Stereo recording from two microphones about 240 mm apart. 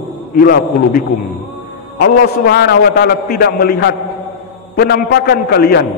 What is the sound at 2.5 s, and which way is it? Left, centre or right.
A man's voice, left.